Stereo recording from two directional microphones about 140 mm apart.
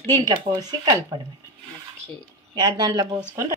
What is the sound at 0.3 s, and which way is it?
Speech, 35° right (ahead or behind).